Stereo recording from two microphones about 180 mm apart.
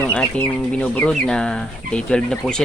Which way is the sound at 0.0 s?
10° left (ahead or behind).